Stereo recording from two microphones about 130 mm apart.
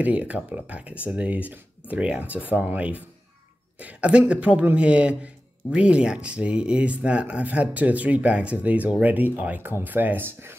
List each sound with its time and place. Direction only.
0.0 s a man's voice: 10° right (ahead or behind)